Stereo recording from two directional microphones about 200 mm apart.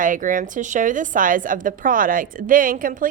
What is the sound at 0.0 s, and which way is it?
A woman's voice, 40° right (ahead or behind).